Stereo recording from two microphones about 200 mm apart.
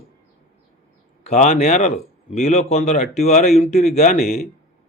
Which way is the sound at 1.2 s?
35° left (ahead or behind).